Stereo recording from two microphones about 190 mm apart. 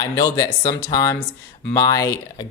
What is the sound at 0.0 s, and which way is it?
Speech, 20° left (ahead or behind).